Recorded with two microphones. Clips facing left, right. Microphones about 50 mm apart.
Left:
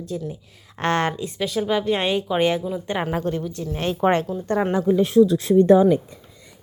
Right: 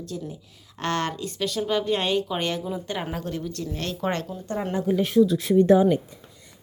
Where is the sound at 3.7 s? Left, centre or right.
Left.